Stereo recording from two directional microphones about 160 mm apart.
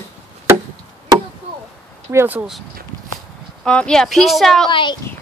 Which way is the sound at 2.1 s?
10° right (ahead or behind).